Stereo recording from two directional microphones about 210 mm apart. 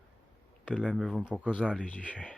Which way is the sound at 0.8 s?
Centre (ahead or behind).